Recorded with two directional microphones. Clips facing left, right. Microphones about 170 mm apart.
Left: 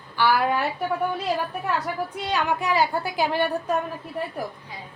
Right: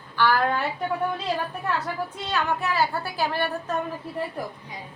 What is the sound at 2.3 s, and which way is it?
A woman's voice, 15° left (ahead or behind).